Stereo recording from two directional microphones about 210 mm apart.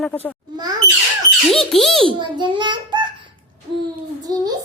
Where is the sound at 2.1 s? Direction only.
20° right (ahead or behind).